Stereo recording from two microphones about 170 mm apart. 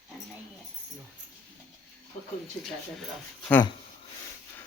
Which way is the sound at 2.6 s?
Centre (ahead or behind).